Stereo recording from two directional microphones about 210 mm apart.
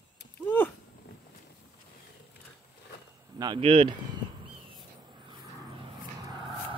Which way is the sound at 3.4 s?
25° right (ahead or behind).